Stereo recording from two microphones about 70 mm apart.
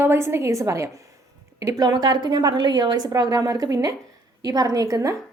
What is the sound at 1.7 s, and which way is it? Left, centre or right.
A woman's voice, right.